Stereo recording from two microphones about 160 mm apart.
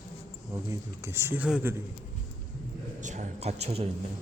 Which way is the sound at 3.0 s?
50° right (ahead or behind).